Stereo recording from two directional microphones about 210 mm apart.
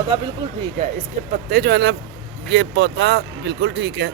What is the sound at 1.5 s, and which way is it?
Speech, 50° right (ahead or behind).